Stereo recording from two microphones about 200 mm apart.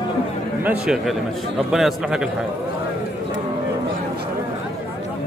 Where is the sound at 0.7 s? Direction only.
5° right (ahead or behind).